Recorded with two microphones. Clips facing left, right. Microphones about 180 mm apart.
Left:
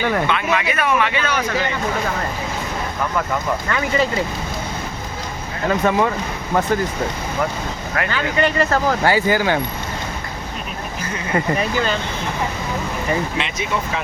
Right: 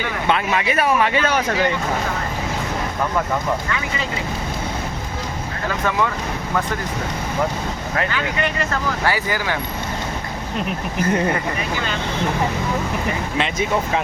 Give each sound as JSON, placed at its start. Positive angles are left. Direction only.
{"t": 0.3, "sound": "speech", "side_deg": -40}
{"t": 3.7, "sound": "speech", "side_deg": 45}
{"t": 5.8, "sound": "speech", "side_deg": 30}
{"t": 8.1, "sound": "speech", "side_deg": 35}